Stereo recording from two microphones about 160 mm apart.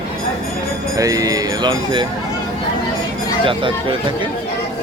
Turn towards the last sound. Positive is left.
turn(degrees=-30)  # may be behind; listen again after turning